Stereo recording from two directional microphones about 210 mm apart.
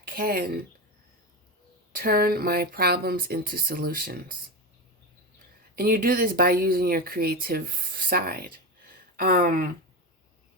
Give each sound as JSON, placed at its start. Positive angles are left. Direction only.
{"t": 0.1, "sound": "speech", "side_deg": -45}
{"t": 1.9, "sound": "speech", "side_deg": -45}
{"t": 5.7, "sound": "speech", "side_deg": -45}